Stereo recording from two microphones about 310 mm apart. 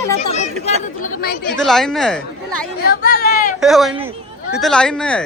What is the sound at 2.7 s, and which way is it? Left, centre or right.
Speech, left.